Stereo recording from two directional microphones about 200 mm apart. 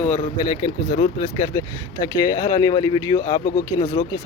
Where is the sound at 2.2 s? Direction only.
20° left (ahead or behind).